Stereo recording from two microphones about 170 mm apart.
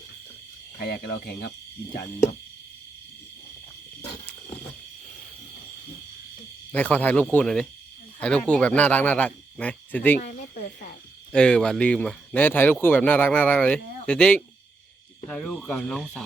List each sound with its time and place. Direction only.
0.8 s speech: 65° left (ahead or behind)
6.7 s speech: 10° left (ahead or behind)
10.2 s a sound: 50° left (ahead or behind)
11.3 s speech: 5° left (ahead or behind)